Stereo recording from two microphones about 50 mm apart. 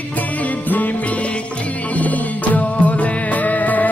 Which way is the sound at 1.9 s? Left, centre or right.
Left.